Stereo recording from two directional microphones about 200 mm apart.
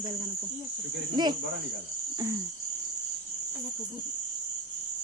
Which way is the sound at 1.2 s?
20° right (ahead or behind).